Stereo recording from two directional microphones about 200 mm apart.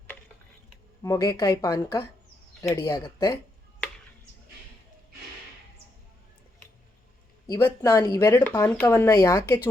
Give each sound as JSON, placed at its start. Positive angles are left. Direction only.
{"t": 1.0, "sound": "speech", "side_deg": 20}
{"t": 7.4, "sound": "speech", "side_deg": 15}